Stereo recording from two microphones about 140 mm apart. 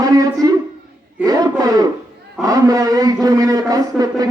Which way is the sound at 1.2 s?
25° right (ahead or behind).